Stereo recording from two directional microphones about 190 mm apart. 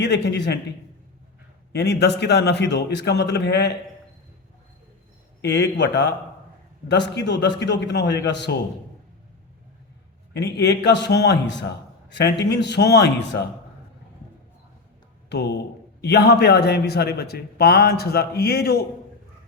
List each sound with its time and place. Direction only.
0.0 s a man's voice: 60° left (ahead or behind)
1.7 s a man's voice: 60° left (ahead or behind)
5.4 s a man's voice: 65° left (ahead or behind)
10.3 s a man's voice: 60° left (ahead or behind)
15.3 s a man's voice: 60° left (ahead or behind)